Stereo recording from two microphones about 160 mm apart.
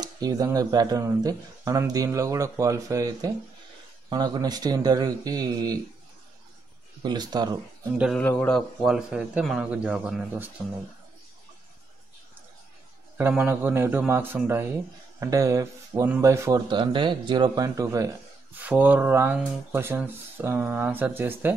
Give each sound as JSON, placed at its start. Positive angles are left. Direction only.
{"t": 0.0, "sound": "speech", "side_deg": -25}
{"t": 7.0, "sound": "speech", "side_deg": -25}
{"t": 8.2, "sound": "a man's voice", "side_deg": 10}
{"t": 13.3, "sound": "speech", "side_deg": -10}
{"t": 16.6, "sound": "speech", "side_deg": -30}